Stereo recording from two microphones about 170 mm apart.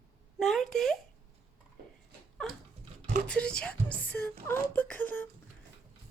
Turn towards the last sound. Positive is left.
turn(degrees=10)  # may be behind; listen again after turning